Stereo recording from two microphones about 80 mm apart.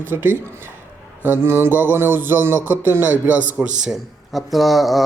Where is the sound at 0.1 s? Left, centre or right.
Right.